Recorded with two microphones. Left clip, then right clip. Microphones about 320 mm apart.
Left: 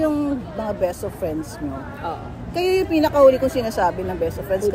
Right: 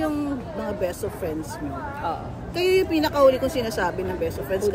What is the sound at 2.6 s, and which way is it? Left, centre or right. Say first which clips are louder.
A woman's voice: left 2 dB; centre.